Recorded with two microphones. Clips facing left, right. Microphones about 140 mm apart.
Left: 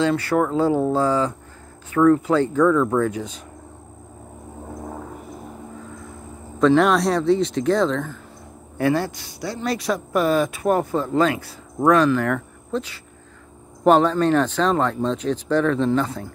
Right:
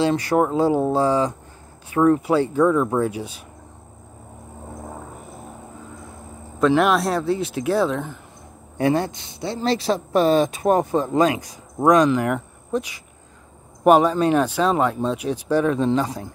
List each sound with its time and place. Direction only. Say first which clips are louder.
0.0 s speech: right 1 dB; 15° right (ahead or behind)
6.6 s speech: left 1 dB; 5° right (ahead or behind)